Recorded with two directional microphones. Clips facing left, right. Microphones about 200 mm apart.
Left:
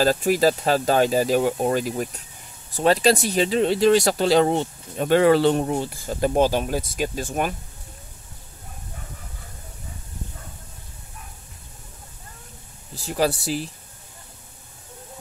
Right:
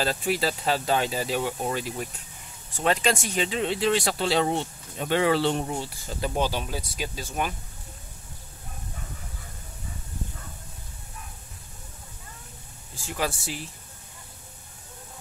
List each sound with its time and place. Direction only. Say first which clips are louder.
0.0 s speech: left 8 dB; 45° left (ahead or behind)
12.9 s speech: left 7 dB; 35° left (ahead or behind)